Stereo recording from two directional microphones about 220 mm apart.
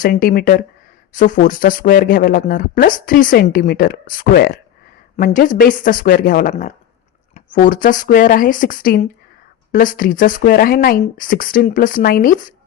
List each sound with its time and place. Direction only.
0.0 s speech: 40° left (ahead or behind)